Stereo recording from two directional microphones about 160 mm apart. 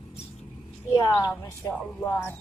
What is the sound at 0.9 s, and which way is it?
Speech, 20° left (ahead or behind).